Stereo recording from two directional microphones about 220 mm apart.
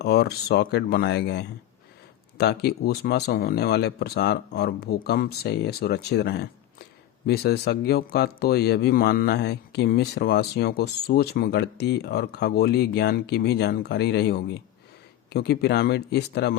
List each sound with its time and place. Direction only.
0.0 s speech: 50° left (ahead or behind)